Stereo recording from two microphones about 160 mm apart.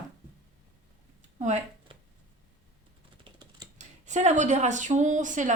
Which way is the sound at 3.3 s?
30° right (ahead or behind).